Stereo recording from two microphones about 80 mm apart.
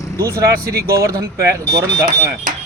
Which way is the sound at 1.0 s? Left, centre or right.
Right.